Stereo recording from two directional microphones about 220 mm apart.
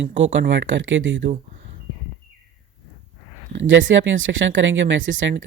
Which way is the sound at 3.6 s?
60° right (ahead or behind).